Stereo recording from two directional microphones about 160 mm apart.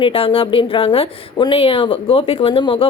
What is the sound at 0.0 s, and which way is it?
A woman's voice, 35° left (ahead or behind).